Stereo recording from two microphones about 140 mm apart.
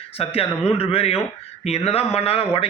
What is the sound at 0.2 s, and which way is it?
Speech, 45° left (ahead or behind).